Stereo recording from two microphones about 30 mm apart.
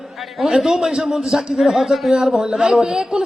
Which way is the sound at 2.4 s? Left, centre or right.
Centre.